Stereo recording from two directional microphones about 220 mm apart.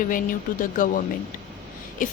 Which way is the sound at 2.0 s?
35° left (ahead or behind).